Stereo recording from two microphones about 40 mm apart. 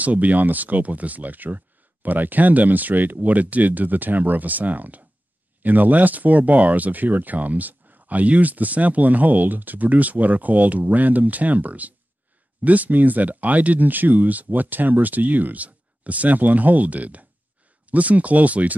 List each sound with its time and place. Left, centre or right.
0.0 s speech: right